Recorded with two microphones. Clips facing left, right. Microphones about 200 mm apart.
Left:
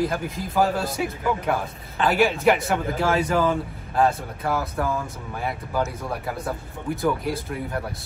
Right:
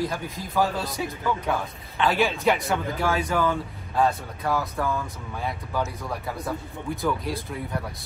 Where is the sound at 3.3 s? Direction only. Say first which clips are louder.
Left 3 dB; 30° left (ahead or behind).